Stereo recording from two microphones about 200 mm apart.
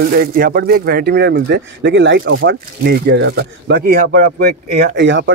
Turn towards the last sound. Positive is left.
turn(degrees=-65)  # may be behind; listen again after turning